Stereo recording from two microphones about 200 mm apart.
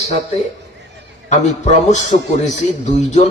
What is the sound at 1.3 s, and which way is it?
A man's voice, 35° left (ahead or behind).